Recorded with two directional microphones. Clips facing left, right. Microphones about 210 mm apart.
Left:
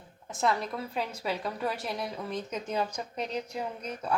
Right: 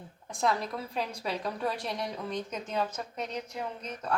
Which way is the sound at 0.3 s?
5° left (ahead or behind).